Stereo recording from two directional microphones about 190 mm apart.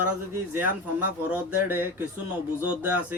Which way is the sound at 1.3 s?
10° right (ahead or behind).